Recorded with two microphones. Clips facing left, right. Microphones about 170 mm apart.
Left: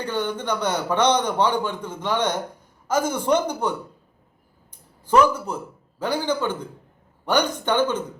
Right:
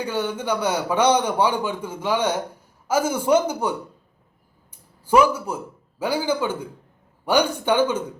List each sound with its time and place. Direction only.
0.0 s speech: 10° right (ahead or behind)
5.0 s speech: 10° right (ahead or behind)